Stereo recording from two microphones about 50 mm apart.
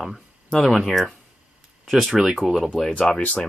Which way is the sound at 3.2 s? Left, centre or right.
Left.